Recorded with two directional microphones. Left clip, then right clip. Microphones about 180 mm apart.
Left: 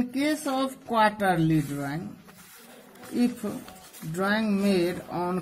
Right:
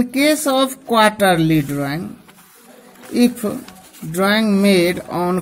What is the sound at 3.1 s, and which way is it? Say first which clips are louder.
Speech: right 11 dB; 40° right (ahead or behind).